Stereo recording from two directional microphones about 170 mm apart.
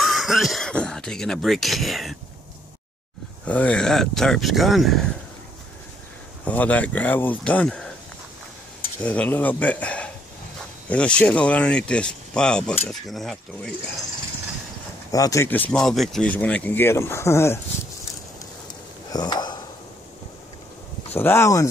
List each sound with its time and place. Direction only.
0.0 s throat clearing: centre (ahead or behind)
3.4 s speech: 10° left (ahead or behind)
6.4 s speech: 10° left (ahead or behind)
9.0 s speech: 10° left (ahead or behind)
15.0 s speech: 20° left (ahead or behind)
19.1 s speech: 25° left (ahead or behind)
21.1 s speech: 15° left (ahead or behind)